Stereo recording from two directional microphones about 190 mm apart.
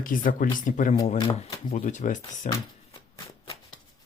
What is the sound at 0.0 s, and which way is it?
Speech, 45° left (ahead or behind).